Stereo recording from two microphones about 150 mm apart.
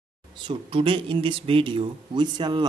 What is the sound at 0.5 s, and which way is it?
Speech, 35° right (ahead or behind).